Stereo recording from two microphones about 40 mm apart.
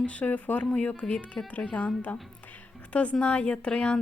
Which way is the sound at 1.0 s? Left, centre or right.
Centre.